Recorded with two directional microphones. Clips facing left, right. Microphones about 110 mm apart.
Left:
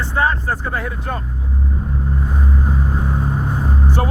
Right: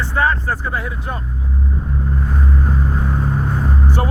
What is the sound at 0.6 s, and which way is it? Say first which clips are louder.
Speech: even; 45° left (ahead or behind).